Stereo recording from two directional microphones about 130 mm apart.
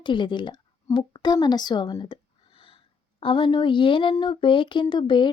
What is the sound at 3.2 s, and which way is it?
A woman's voice, 40° left (ahead or behind).